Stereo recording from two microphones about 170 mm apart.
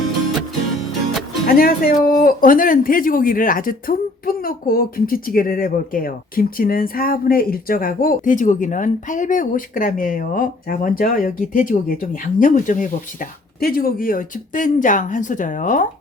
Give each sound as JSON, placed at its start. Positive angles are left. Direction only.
{"t": 1.5, "sound": "speech", "side_deg": 60}